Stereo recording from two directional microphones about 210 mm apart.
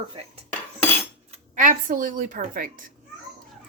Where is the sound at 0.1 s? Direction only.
25° right (ahead or behind).